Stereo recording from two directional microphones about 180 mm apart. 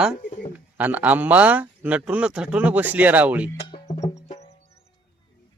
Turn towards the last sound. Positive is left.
turn(degrees=40)  # may be behind; listen again after turning